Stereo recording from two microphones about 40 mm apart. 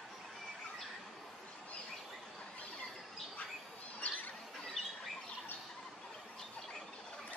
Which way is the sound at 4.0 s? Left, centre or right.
Left.